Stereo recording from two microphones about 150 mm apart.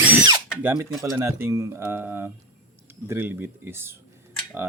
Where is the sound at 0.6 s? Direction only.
15° right (ahead or behind).